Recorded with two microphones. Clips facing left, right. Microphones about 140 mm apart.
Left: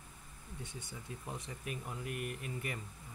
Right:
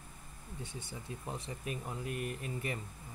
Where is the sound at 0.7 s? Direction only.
30° right (ahead or behind).